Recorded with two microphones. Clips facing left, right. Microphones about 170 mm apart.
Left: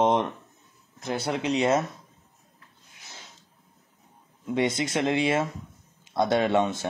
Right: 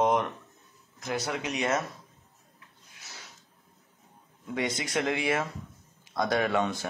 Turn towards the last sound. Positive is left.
turn(degrees=25)  # may be behind; listen again after turning